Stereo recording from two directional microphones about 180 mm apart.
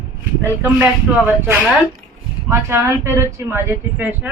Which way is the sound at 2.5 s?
15° right (ahead or behind).